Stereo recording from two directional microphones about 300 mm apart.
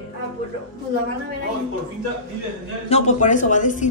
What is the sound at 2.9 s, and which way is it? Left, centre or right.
Speech, left.